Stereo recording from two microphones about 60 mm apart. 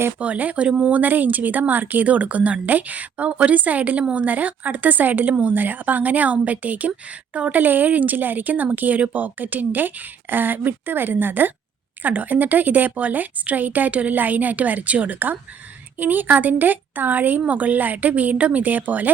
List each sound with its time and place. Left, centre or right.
0.2 s speech: right